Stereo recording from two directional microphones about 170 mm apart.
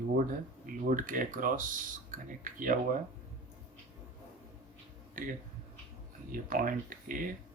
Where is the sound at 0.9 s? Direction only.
55° right (ahead or behind).